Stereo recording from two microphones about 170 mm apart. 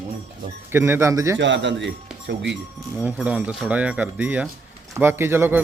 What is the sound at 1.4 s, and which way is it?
Speech, 90° right.